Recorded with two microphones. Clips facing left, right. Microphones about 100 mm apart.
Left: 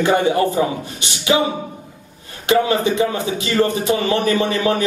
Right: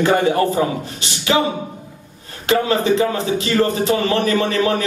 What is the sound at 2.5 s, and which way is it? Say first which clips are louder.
A man's voice: even; 20° left (ahead or behind).